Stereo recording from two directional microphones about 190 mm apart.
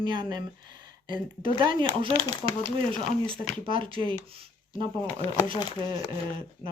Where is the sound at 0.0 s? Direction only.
25° right (ahead or behind).